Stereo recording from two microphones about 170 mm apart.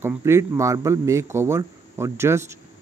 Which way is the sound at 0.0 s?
15° right (ahead or behind).